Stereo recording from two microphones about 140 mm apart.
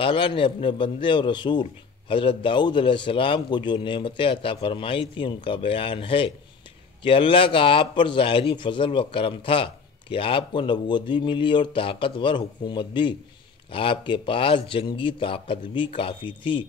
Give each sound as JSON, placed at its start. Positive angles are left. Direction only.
{"t": 0.0, "sound": "a man's voice", "side_deg": 40}